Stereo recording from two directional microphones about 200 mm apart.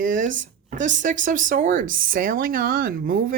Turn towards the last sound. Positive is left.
turn(degrees=-45)  # may be behind; listen again after turning